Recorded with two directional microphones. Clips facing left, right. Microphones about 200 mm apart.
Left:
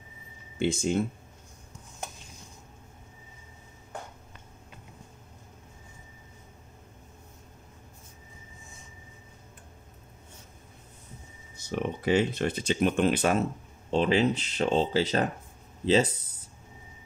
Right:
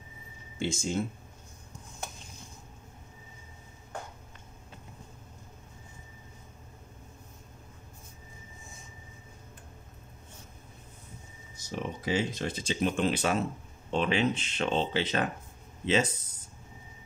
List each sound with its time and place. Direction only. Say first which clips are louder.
0.6 s speech: left 5 dB; 60° left (ahead or behind)
12.0 s speech: left 6 dB; 60° left (ahead or behind)
13.8 s speech: left 4 dB; 35° left (ahead or behind)